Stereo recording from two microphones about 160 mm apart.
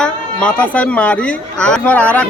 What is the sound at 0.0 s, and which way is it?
Speech, 5° left (ahead or behind).